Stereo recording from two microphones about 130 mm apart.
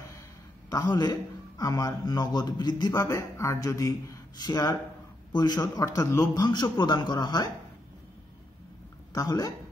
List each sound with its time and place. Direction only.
0.7 s a man's voice: 30° left (ahead or behind)
9.1 s a man's voice: 30° left (ahead or behind)